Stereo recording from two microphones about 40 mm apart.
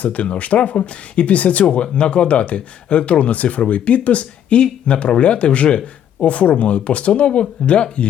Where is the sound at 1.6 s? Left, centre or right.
Left.